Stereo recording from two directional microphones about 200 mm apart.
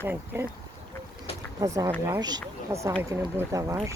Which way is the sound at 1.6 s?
15° right (ahead or behind).